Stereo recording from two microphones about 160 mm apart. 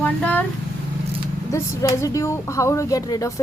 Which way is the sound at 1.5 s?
20° left (ahead or behind).